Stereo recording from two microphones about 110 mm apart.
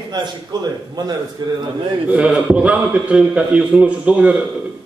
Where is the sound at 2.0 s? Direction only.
10° right (ahead or behind).